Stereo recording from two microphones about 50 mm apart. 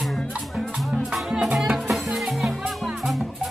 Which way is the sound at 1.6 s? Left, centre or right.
Centre.